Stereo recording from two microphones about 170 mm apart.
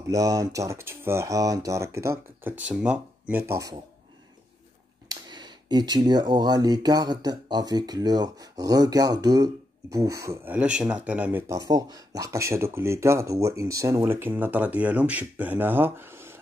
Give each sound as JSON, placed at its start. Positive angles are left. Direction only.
{"t": 0.1, "sound": "speech", "side_deg": -20}
{"t": 5.0, "sound": "speech", "side_deg": -25}